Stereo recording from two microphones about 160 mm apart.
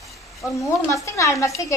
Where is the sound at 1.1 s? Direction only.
20° left (ahead or behind).